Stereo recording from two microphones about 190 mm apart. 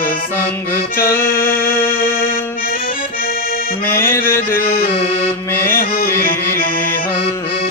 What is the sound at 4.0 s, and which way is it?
Music, 15° left (ahead or behind).